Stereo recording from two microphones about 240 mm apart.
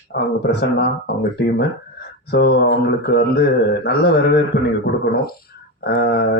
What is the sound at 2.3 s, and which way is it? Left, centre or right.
Speech, left.